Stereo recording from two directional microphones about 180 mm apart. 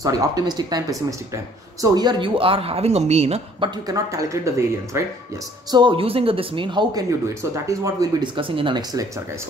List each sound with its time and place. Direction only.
0.0 s speech: 20° right (ahead or behind); by 3.7 s 35° right (ahead or behind)
3.7 s speech: 20° right (ahead or behind)